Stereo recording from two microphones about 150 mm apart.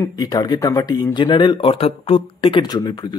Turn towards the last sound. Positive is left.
turn(degrees=30)  # may be behind; listen again after turning